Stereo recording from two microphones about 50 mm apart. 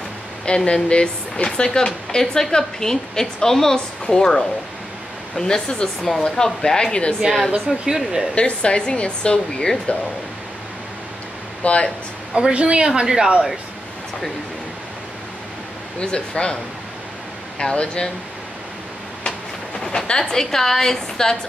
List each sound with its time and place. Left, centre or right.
0.7 s speech: centre
7.7 s speech: centre
8.4 s speech: left
11.6 s speech: left
12.4 s a woman's voice: right
13.0 s speech: centre
16.0 s speech: centre
17.6 s speech: centre
19.8 s speech: centre